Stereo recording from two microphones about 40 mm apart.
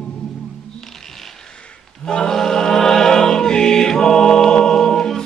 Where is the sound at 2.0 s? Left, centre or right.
Centre.